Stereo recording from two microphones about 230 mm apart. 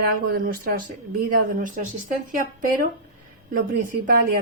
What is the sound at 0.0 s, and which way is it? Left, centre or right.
A woman's voice, right.